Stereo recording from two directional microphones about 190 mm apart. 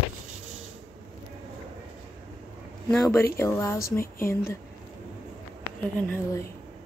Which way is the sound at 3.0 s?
15° left (ahead or behind).